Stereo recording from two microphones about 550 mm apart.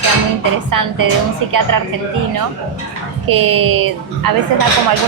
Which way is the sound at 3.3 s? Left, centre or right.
Right.